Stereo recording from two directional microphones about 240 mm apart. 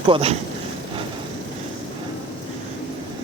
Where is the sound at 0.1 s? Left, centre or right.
Right.